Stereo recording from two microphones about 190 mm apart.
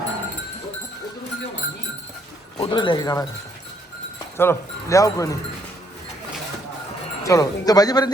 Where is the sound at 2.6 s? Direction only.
25° left (ahead or behind).